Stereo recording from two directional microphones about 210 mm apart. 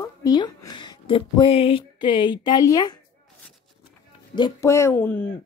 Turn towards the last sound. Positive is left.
turn(degrees=10)  # may be behind; listen again after turning